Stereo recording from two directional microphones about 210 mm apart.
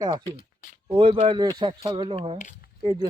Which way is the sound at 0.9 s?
25° right (ahead or behind).